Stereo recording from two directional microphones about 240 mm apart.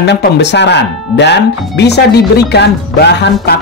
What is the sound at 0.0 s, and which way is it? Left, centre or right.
Speech, left.